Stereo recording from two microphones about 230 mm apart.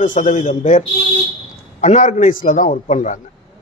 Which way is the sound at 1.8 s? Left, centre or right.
Left.